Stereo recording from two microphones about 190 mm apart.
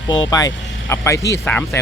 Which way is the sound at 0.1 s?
20° left (ahead or behind).